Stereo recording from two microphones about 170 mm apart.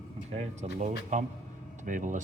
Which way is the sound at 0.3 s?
45° right (ahead or behind).